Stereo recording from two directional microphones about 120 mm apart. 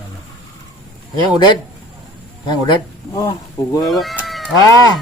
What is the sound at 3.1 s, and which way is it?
Mantra, 30° left (ahead or behind).